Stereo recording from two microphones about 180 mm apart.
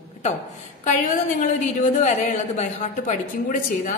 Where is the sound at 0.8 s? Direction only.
45° left (ahead or behind).